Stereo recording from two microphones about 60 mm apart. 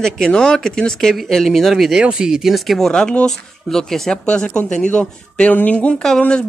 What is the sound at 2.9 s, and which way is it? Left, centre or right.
A woman's voice, centre.